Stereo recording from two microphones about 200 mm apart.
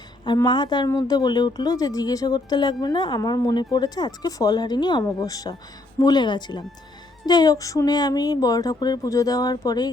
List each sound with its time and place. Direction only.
0.3 s speech: 20° left (ahead or behind)